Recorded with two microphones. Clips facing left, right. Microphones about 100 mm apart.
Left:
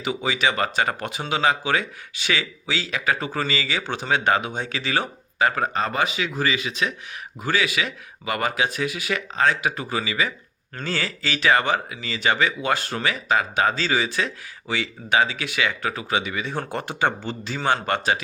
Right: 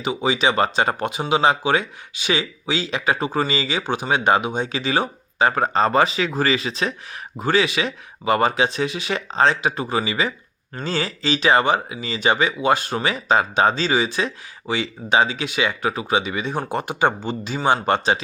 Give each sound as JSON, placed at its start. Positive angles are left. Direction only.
{"t": 0.0, "sound": "speech", "side_deg": -20}